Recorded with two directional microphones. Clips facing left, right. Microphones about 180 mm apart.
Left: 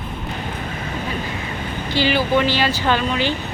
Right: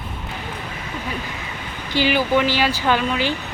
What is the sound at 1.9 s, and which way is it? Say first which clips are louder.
Speech: even; 15° right (ahead or behind).